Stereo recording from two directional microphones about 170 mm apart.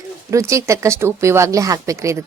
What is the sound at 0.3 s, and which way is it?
Speech, 20° right (ahead or behind).